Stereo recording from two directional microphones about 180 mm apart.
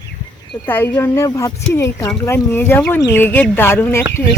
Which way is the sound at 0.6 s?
10° left (ahead or behind).